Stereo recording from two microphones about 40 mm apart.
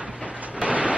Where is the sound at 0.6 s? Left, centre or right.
Right.